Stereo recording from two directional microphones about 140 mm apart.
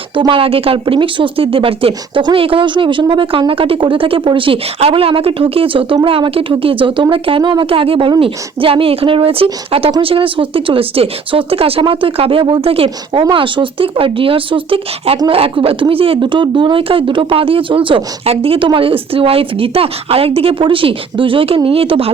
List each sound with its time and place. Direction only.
0.2 s speech: 40° right (ahead or behind)